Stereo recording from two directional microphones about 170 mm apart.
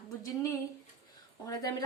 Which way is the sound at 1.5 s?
20° left (ahead or behind).